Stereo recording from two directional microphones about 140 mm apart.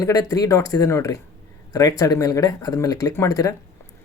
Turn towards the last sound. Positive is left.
turn(degrees=25)  # may be behind; listen again after turning